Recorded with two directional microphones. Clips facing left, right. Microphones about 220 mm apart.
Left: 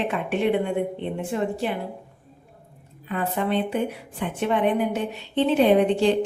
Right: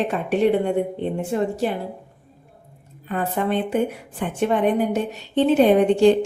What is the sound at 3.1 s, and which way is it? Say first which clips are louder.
A woman's voice: right 2 dB; 45° right (ahead or behind).